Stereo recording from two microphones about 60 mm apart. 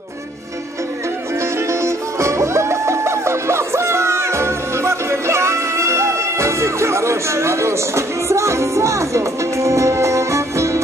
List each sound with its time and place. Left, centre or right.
1.4 s music: right